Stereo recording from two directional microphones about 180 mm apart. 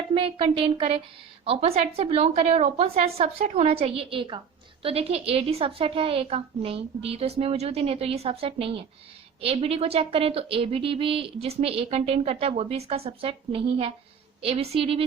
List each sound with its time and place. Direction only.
0.1 s speech: 30° right (ahead or behind)